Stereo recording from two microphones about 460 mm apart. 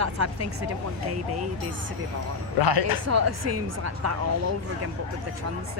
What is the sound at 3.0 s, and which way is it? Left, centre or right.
Speech, right.